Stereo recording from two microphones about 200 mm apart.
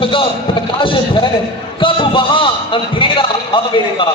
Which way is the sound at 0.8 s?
25° left (ahead or behind).